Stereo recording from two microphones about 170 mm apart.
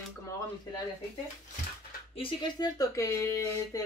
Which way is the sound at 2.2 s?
30° left (ahead or behind).